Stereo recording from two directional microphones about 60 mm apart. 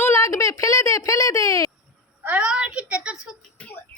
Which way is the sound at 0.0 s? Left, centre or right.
Left.